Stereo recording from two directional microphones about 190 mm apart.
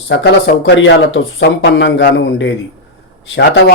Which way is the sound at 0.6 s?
70° left (ahead or behind).